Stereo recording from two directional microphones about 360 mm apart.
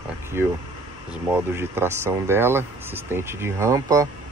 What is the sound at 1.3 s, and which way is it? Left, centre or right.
Speech, centre.